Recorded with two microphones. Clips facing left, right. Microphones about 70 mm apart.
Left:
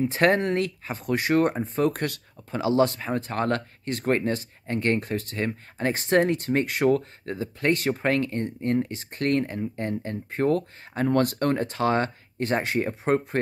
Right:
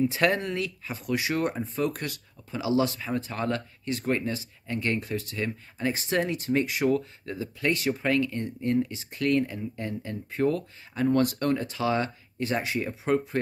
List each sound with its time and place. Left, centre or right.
0.0 s speech: left